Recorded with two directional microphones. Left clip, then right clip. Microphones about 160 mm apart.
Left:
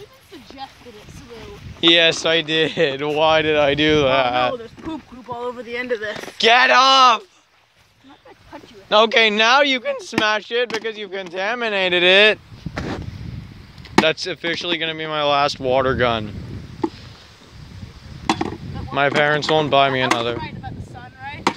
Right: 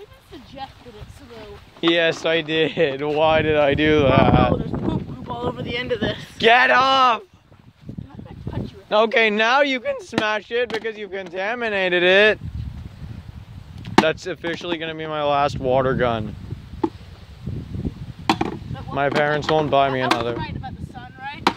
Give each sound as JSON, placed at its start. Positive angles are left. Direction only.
{"t": 1.8, "sound": "speech", "side_deg": 5}
{"t": 6.3, "sound": "speech", "side_deg": -10}
{"t": 8.8, "sound": "speech", "side_deg": 10}
{"t": 9.4, "sound": "speech", "side_deg": 10}
{"t": 13.8, "sound": "speech", "side_deg": -5}
{"t": 16.8, "sound": "a sound", "side_deg": 0}
{"t": 18.2, "sound": "chop", "side_deg": 5}